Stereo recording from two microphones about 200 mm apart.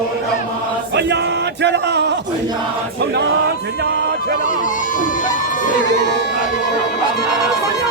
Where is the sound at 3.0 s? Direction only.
55° right (ahead or behind).